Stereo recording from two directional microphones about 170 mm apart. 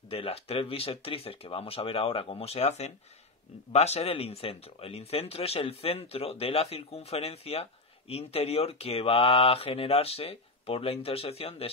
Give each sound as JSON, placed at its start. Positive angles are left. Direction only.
{"t": 0.1, "sound": "speech", "side_deg": 35}